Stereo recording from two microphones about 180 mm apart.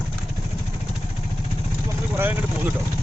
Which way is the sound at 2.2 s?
10° right (ahead or behind).